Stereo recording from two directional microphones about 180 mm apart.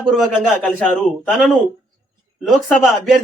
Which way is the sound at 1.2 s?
5° left (ahead or behind).